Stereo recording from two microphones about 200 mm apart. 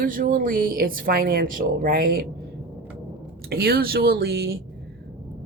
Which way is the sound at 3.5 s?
50° right (ahead or behind).